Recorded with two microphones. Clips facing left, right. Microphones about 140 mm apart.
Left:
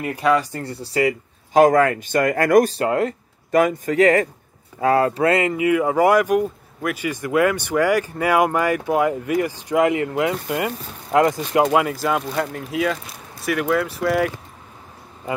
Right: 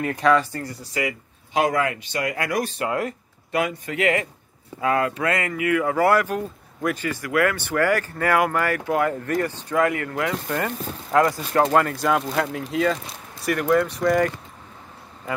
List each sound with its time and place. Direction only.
0.0 s speech: 10° left (ahead or behind)
0.6 s speech: 30° left (ahead or behind); by 7.1 s 5° left (ahead or behind)
7.1 s speech: 20° left (ahead or behind)
11.6 s speech: 5° left (ahead or behind)